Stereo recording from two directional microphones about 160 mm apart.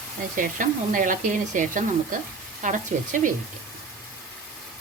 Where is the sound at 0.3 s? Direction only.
55° right (ahead or behind).